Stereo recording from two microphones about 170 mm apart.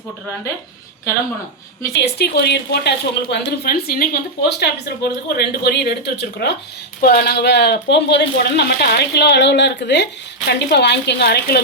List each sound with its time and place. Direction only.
2.0 s a woman's voice: 75° left (ahead or behind)
7.0 s a woman's voice: 65° left (ahead or behind)